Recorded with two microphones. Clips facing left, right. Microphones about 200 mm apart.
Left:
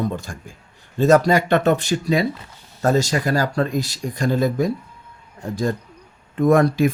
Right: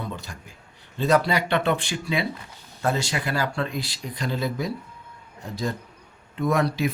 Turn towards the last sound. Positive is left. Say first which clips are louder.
# left 8 dB
turn(degrees=50)  # may be behind; listen again after turning